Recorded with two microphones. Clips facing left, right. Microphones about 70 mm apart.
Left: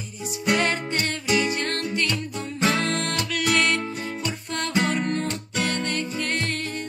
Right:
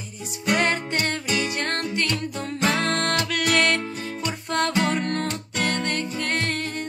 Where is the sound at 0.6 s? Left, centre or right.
Right.